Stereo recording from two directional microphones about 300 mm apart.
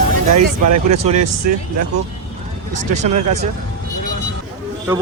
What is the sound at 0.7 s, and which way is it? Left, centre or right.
Speech, right.